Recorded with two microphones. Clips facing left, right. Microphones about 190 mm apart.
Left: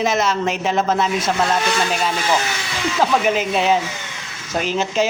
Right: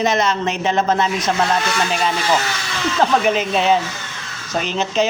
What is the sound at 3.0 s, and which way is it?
Speech, 5° left (ahead or behind).